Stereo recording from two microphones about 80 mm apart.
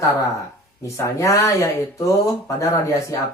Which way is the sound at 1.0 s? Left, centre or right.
Left.